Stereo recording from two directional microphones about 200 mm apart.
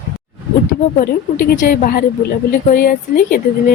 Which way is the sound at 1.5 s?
50° left (ahead or behind).